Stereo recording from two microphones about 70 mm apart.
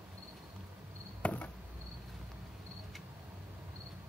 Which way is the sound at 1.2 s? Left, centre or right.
Centre.